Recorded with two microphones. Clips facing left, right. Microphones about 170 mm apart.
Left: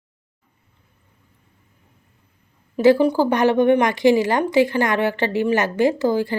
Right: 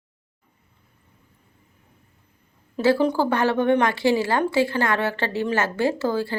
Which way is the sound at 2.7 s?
15° left (ahead or behind).